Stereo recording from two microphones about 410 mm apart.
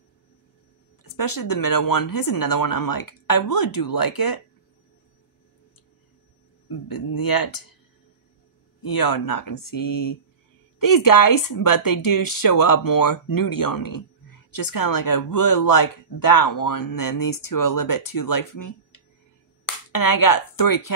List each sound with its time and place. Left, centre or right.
1.0 s speech: left
6.9 s speech: left
8.8 s speech: left